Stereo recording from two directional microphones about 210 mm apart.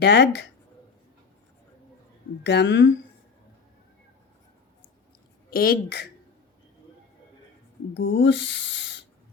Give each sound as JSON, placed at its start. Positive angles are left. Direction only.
{"t": 0.0, "sound": "speech", "side_deg": 55}
{"t": 2.4, "sound": "speech", "side_deg": 55}
{"t": 5.5, "sound": "speech", "side_deg": 45}
{"t": 7.9, "sound": "speech", "side_deg": 55}